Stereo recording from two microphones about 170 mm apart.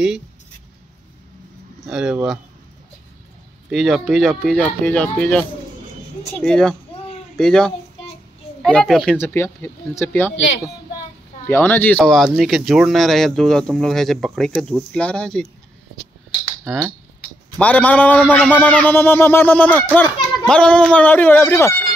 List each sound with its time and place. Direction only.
1.9 s speech: 5° right (ahead or behind)
3.7 s speech: centre (ahead or behind)
9.2 s speech: 15° left (ahead or behind)
11.4 s speech: 10° left (ahead or behind)
17.6 s speech: 10° left (ahead or behind)